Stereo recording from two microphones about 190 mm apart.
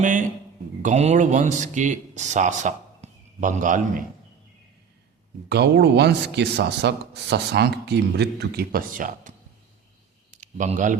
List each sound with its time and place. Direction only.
0.0 s a man's voice: 40° right (ahead or behind)
5.5 s speech: 65° right (ahead or behind); by 9.3 s 45° right (ahead or behind)
10.3 s a sound: 40° right (ahead or behind)